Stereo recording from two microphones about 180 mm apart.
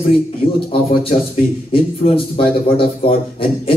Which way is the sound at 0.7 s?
30° left (ahead or behind).